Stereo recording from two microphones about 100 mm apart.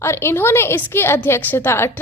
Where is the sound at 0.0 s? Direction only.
25° left (ahead or behind).